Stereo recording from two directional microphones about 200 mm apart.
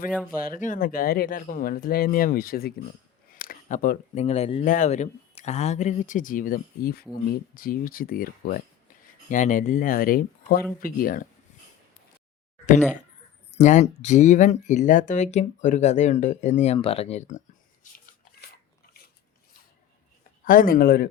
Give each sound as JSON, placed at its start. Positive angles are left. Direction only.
{"t": 0.4, "sound": "speech", "side_deg": 40}
{"t": 4.6, "sound": "speech", "side_deg": 40}
{"t": 13.6, "sound": "speech", "side_deg": 35}
{"t": 20.4, "sound": "speech", "side_deg": 45}